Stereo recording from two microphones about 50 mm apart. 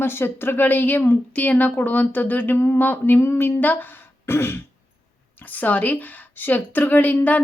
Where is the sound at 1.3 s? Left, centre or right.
Left.